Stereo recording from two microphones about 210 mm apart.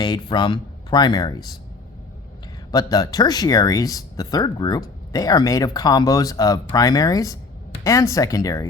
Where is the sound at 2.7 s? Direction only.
15° left (ahead or behind).